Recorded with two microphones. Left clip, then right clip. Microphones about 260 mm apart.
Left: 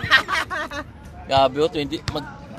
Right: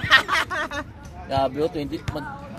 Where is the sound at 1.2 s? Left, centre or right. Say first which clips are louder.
Left 5 dB; left.